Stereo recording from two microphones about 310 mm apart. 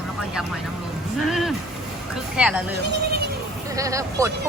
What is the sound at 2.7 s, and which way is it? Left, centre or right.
Speech, right.